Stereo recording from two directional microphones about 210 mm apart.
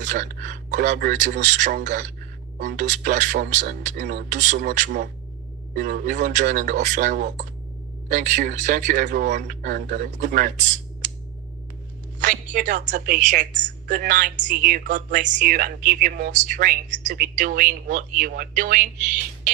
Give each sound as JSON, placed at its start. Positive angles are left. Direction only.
{"t": 0.0, "sound": "speech", "side_deg": -40}
{"t": 12.2, "sound": "a woman's voice", "side_deg": -40}